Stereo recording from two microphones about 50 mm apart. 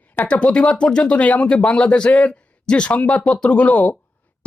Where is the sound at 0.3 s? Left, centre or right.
Left.